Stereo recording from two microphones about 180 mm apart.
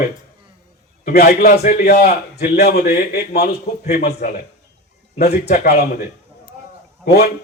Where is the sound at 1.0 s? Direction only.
60° left (ahead or behind).